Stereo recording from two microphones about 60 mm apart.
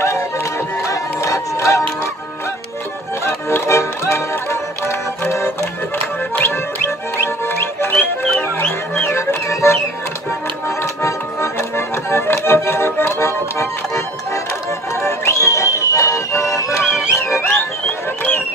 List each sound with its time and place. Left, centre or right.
0.0 s music: left
3.3 s music: left
8.9 s music: left
10.8 s accordion: left
15.0 s music: left